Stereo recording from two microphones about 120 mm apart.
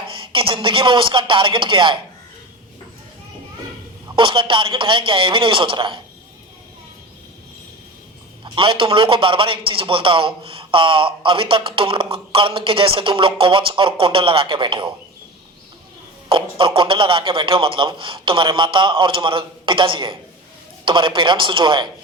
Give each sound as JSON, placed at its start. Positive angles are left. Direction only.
{"t": 0.3, "sound": "speech", "side_deg": -45}
{"t": 4.1, "sound": "speech", "side_deg": -45}
{"t": 8.4, "sound": "speech", "side_deg": -45}
{"t": 16.3, "sound": "speech", "side_deg": -45}